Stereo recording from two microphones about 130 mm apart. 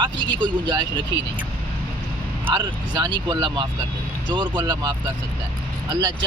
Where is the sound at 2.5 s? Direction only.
35° right (ahead or behind).